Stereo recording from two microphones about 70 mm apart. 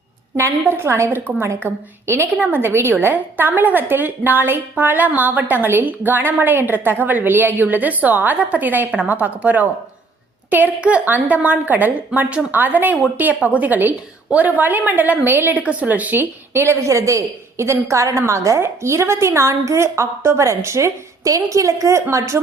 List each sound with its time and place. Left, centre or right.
0.3 s a woman's voice: right
16.5 s a woman's voice: right
16.8 s a woman's voice: right